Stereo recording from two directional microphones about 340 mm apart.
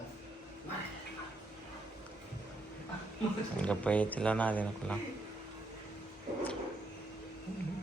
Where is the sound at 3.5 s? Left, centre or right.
Centre.